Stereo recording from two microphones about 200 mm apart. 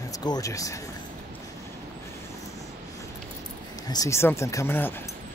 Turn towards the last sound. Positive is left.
turn(degrees=10)  # may be behind; listen again after turning